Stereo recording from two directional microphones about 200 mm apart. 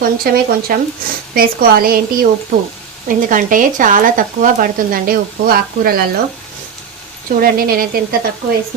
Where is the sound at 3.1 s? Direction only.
40° right (ahead or behind).